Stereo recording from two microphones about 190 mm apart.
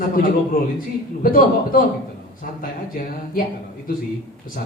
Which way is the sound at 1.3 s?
45° left (ahead or behind).